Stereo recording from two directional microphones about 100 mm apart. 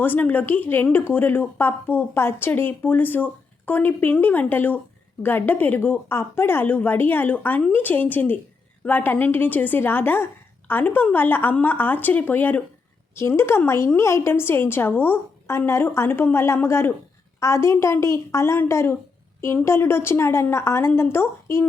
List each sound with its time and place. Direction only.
0.0 s speech: 20° left (ahead or behind)